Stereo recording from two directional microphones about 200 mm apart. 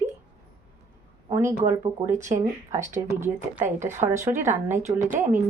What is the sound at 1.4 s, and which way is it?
A woman's voice, 15° right (ahead or behind).